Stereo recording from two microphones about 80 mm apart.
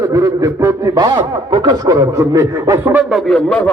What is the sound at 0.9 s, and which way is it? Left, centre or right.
A man's voice, right.